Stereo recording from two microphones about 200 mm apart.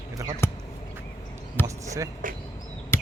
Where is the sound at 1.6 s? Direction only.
15° right (ahead or behind).